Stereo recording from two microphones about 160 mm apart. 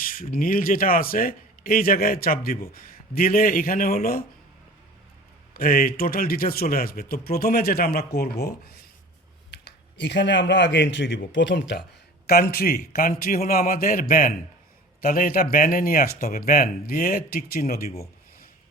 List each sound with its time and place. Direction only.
0.0 s speech: 60° left (ahead or behind)
5.5 s speech: 65° left (ahead or behind); by 11.8 s 90° left
12.2 s speech: 80° left; by 16.4 s 55° left (ahead or behind)
16.5 s speech: 65° left (ahead or behind)